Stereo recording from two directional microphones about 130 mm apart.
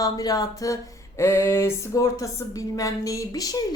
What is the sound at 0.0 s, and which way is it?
A woman's voice, 30° left (ahead or behind).